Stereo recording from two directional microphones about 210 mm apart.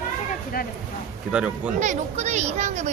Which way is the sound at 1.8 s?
35° right (ahead or behind).